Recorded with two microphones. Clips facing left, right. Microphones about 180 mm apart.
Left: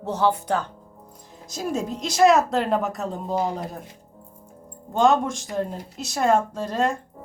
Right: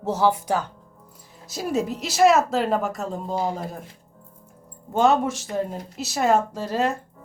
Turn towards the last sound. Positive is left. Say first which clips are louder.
# even
turn(degrees=-5)  # may be behind; listen again after turning